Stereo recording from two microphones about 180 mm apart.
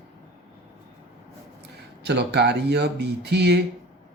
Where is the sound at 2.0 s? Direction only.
70° right (ahead or behind).